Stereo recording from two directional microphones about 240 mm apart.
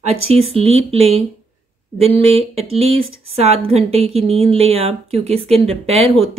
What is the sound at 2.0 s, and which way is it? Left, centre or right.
Speech, right.